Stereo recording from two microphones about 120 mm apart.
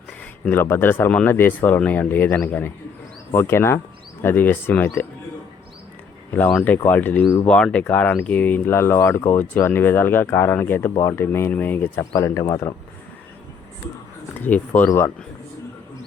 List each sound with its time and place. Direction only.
0.4 s speech: 15° left (ahead or behind)
6.3 s speech: 15° left (ahead or behind)
14.3 s speech: 15° left (ahead or behind)